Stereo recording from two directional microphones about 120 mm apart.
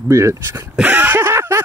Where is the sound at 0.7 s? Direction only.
15° right (ahead or behind).